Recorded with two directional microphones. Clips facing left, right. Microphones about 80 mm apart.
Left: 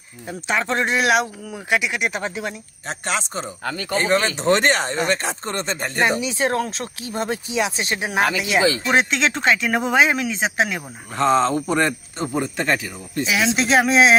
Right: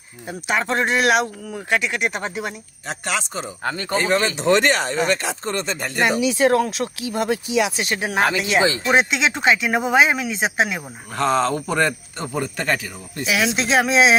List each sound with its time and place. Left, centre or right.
0.3 s speech: centre
3.1 s speech: left
3.6 s speech: right
3.9 s speech: left
8.4 s speech: centre
8.6 s speech: right
8.9 s speech: centre
11.2 s speech: left
13.2 s speech: centre